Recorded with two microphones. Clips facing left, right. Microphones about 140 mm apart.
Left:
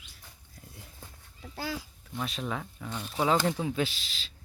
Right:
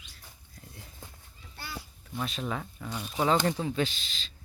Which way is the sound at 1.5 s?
90° left.